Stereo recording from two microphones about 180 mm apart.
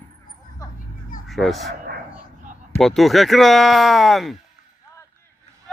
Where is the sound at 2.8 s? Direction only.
Centre (ahead or behind).